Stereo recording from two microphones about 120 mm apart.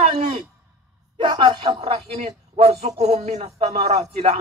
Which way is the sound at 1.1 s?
40° right (ahead or behind).